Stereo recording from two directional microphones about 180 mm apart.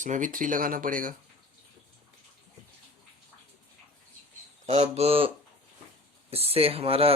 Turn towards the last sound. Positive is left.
turn(degrees=-35)  # may be behind; listen again after turning